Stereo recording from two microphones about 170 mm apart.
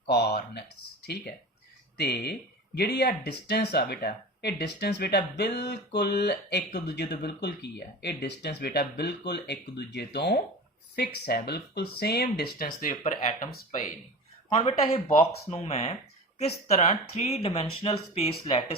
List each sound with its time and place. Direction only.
0.1 s speech: 70° left (ahead or behind); by 13.8 s 50° left (ahead or behind)
14.5 s speech: 35° left (ahead or behind)